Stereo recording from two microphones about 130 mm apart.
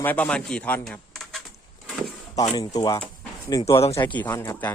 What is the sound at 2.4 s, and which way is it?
Speech, 30° left (ahead or behind).